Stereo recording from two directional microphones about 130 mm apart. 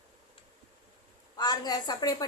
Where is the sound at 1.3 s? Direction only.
30° left (ahead or behind).